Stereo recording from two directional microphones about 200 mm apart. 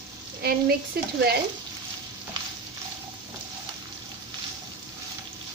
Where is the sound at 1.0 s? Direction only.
50° right (ahead or behind).